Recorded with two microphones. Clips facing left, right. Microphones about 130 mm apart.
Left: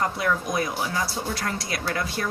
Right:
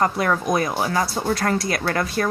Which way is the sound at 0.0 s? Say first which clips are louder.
Right 5 dB; 55° right (ahead or behind).